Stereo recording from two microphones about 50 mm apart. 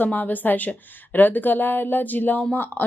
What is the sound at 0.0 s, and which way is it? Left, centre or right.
Speech, left.